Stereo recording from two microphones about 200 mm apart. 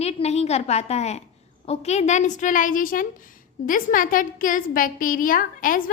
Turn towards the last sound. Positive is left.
turn(degrees=45)  # may be behind; listen again after turning